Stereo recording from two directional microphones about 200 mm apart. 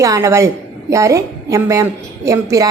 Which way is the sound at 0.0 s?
15° right (ahead or behind).